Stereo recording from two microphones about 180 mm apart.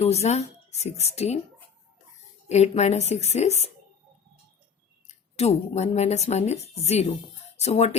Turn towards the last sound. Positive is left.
turn(degrees=35)  # may be behind; listen again after turning